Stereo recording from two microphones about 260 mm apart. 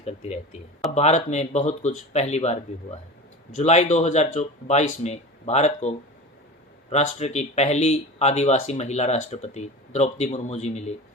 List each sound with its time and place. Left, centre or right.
0.0 s speech: left
6.9 s speech: left